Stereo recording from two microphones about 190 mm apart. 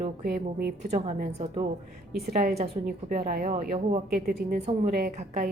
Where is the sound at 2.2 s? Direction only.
50° right (ahead or behind).